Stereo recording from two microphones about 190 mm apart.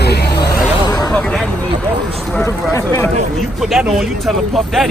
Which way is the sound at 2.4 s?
15° left (ahead or behind).